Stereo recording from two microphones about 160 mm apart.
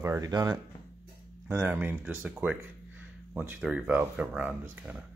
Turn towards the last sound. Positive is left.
turn(degrees=-10)  # may be behind; listen again after turning